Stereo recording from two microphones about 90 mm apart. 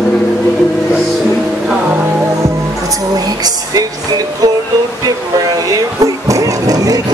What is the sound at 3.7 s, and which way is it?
Music, 45° right (ahead or behind).